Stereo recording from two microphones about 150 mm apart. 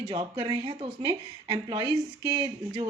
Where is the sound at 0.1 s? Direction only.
30° right (ahead or behind).